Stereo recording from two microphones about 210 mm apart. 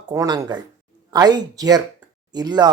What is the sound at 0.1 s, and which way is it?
Speech, 15° right (ahead or behind).